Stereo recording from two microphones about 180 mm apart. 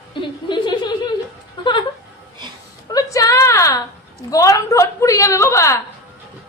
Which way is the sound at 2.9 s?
20° left (ahead or behind).